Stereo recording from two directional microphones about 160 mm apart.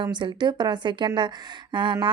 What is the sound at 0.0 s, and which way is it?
Speech, 30° right (ahead or behind).